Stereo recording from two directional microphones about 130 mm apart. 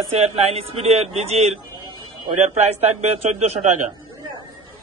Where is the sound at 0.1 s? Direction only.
55° right (ahead or behind).